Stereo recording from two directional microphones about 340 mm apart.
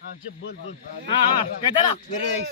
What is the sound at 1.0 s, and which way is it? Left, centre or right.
Speech, centre.